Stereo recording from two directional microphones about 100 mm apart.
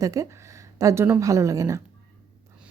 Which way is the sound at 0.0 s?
35° right (ahead or behind).